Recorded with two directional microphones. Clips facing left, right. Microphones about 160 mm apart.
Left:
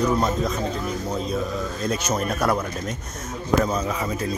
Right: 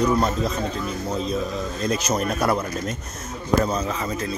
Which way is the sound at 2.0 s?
10° right (ahead or behind).